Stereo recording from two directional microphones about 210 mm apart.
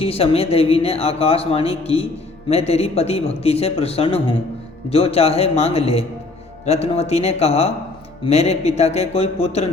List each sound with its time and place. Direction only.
0.0 s speech: 30° left (ahead or behind)